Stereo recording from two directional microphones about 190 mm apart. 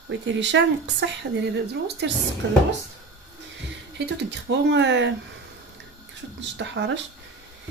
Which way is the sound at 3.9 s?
65° right (ahead or behind).